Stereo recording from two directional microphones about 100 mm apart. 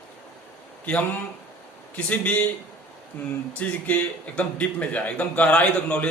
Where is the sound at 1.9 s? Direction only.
15° left (ahead or behind).